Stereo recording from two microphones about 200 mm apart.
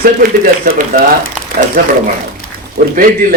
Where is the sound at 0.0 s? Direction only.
45° right (ahead or behind).